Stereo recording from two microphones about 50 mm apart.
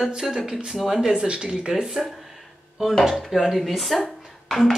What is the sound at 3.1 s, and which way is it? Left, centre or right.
Speech, centre.